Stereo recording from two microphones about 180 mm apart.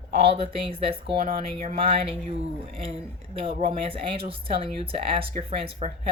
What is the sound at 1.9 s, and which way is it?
Speech, 30° right (ahead or behind).